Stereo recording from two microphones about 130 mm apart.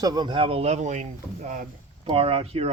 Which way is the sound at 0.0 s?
30° right (ahead or behind).